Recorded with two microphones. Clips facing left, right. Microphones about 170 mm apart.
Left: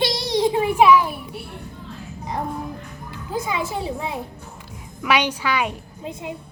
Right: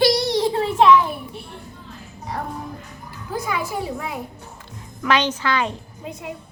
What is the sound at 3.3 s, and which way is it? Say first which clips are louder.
Speech: even; 20° left (ahead or behind).